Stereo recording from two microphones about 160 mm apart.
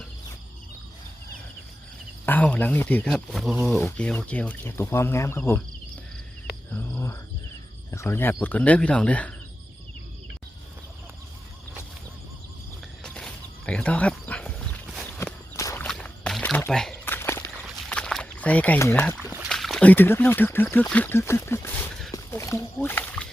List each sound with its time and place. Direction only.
2.2 s speech: 10° left (ahead or behind)
3.1 s speech: centre (ahead or behind)
3.8 s speech: 10° left (ahead or behind)
6.7 s a sound: 10° left (ahead or behind)
7.9 s speech: 20° left (ahead or behind)
13.0 s horse: 5° left (ahead or behind)
15.2 s walk: 15° left (ahead or behind)
15.9 s a sound: 5° left (ahead or behind)
17.2 s walk: 15° left (ahead or behind)
17.8 s rowboat: 5° left (ahead or behind)
19.4 s speech: centre (ahead or behind)
22.1 s a sound: 20° left (ahead or behind)